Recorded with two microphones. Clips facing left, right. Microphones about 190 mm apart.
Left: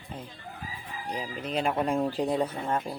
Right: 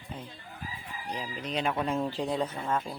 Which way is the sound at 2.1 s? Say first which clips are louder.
Left 3 dB; 35° left (ahead or behind).